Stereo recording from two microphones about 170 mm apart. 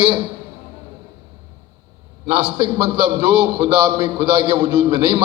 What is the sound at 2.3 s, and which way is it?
A man's voice, 30° right (ahead or behind).